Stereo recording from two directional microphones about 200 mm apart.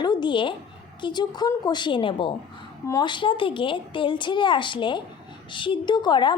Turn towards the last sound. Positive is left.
turn(degrees=20)  # may be behind; listen again after turning